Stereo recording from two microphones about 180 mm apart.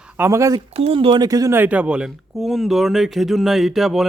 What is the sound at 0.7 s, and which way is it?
Speech, 30° right (ahead or behind).